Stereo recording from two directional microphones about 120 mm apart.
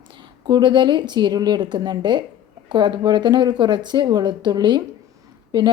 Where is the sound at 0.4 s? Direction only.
40° right (ahead or behind).